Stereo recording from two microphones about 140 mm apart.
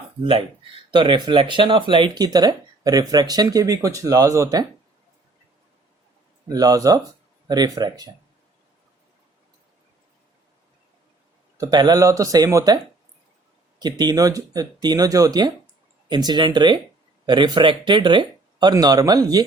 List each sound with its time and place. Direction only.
0.9 s speech: 30° right (ahead or behind)
6.5 s speech: 25° right (ahead or behind)
11.5 s speech: 30° right (ahead or behind)